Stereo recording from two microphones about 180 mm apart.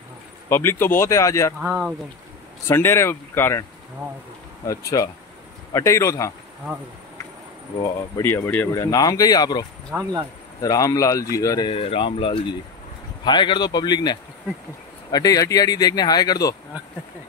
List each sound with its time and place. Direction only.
0.5 s speech: 15° left (ahead or behind)
1.6 s speech: 5° right (ahead or behind)
2.7 s speech: 15° left (ahead or behind)
4.6 s speech: 20° left (ahead or behind)
7.8 s speech: 15° left (ahead or behind)
9.9 s speech: 10° right (ahead or behind)
10.6 s speech: 20° left (ahead or behind)